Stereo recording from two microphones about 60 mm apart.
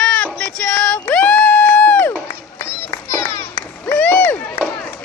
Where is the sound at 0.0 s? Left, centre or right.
Left.